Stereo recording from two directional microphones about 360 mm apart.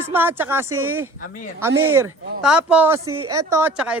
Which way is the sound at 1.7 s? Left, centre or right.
Right.